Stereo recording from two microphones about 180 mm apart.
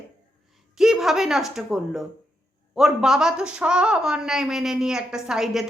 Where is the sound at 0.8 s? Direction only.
Centre (ahead or behind).